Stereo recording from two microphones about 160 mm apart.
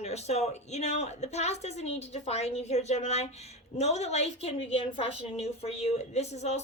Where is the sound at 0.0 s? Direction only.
40° left (ahead or behind).